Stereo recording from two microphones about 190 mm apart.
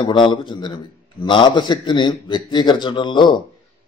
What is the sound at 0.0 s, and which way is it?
A man's voice, 25° left (ahead or behind).